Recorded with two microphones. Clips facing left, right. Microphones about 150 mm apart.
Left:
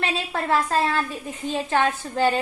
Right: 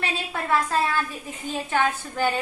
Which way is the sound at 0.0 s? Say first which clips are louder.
Left 3 dB; 30° left (ahead or behind).